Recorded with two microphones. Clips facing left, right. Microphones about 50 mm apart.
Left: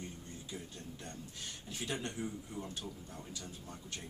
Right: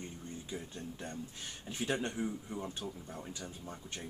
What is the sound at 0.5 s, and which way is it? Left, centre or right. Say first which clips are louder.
Speech: right 3 dB; centre.